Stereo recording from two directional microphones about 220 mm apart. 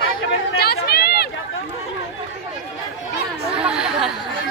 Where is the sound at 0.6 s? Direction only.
45° left (ahead or behind).